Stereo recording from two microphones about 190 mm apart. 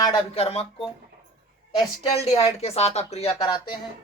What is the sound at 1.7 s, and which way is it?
Speech, 30° left (ahead or behind).